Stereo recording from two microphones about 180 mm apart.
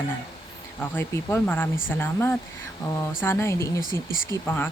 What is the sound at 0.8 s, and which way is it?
Speech, 15° left (ahead or behind).